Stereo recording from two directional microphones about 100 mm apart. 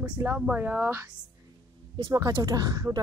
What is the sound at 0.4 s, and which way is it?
Speech, 15° right (ahead or behind).